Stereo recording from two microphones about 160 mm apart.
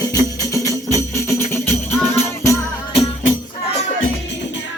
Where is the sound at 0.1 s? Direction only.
20° left (ahead or behind).